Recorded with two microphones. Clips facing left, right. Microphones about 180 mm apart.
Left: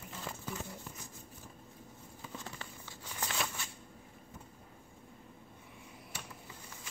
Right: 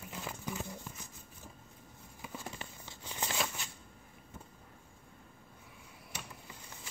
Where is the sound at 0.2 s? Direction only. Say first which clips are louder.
Right 1 dB; 5° right (ahead or behind).